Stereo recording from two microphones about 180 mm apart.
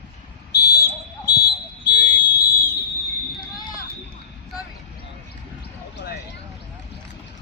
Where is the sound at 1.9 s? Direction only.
70° left (ahead or behind).